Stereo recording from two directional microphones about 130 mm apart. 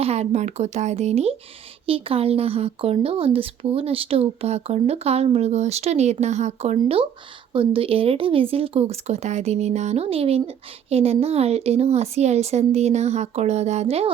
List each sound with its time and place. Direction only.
0.0 s speech: 55° right (ahead or behind)